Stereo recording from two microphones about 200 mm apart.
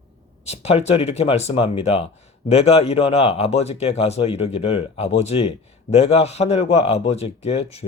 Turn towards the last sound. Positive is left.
turn(degrees=30)  # may be behind; listen again after turning